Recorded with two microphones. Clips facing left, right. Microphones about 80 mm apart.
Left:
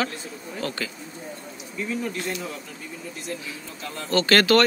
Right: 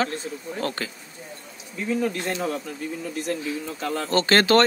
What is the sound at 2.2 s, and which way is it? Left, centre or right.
Speech, right.